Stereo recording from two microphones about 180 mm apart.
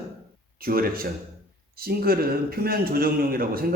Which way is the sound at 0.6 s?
55° right (ahead or behind).